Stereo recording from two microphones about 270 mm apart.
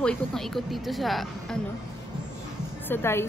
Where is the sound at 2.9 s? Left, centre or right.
Centre.